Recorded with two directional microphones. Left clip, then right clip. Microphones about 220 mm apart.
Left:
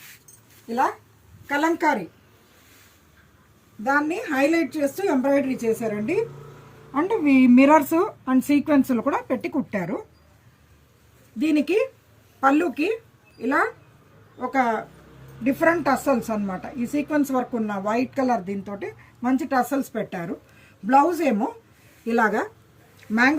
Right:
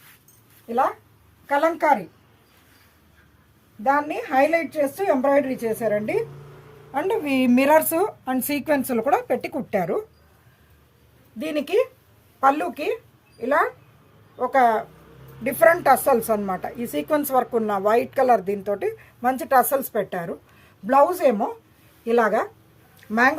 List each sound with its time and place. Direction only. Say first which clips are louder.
1.5 s a woman's voice: right 3 dB; 25° right (ahead or behind)
3.8 s speech: right 1 dB; 30° right (ahead or behind)
6.9 s speech: left 2 dB; 55° right (ahead or behind)
11.3 s speech: left 1 dB; 35° right (ahead or behind)
14.4 s speech: right 4 dB; 45° right (ahead or behind)